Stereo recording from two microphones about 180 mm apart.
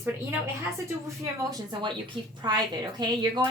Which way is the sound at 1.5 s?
25° right (ahead or behind).